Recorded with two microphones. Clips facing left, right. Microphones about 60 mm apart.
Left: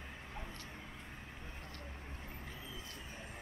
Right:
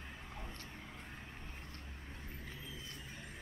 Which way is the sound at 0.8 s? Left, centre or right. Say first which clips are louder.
Even; centre.